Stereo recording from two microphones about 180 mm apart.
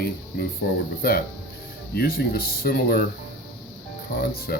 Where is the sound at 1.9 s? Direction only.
55° left (ahead or behind).